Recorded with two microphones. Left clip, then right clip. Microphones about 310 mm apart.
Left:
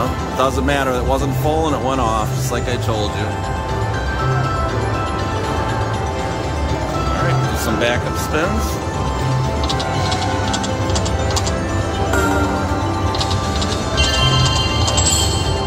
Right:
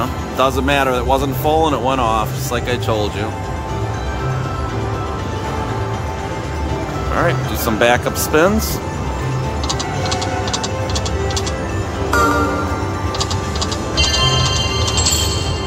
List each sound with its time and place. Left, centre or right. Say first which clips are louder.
0.4 s speech: right 3 dB; centre
7.8 s speech: right 7 dB; centre
13.9 s music: right 2 dB; centre